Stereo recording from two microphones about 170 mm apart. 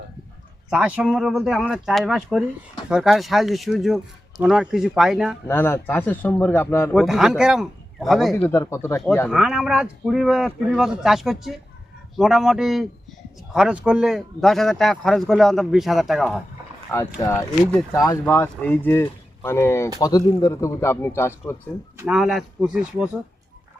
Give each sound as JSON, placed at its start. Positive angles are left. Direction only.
{"t": 0.7, "sound": "a man's voice", "side_deg": -5}
{"t": 5.5, "sound": "speech", "side_deg": 15}
{"t": 6.9, "sound": "a man's voice", "side_deg": 0}
{"t": 8.4, "sound": "speech", "side_deg": 15}
{"t": 9.2, "sound": "a man's voice", "side_deg": 0}
{"t": 17.2, "sound": "speech", "side_deg": 15}
{"t": 21.9, "sound": "a man's voice", "side_deg": -5}